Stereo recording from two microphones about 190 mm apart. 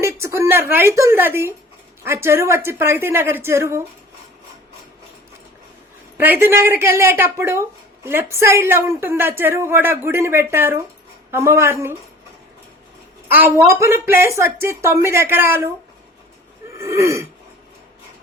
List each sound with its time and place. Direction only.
0.0 s a woman's voice: 15° right (ahead or behind)
6.1 s a woman's voice: 10° right (ahead or behind)
13.2 s a woman's voice: 10° right (ahead or behind)
16.7 s a woman's voice: 15° right (ahead or behind)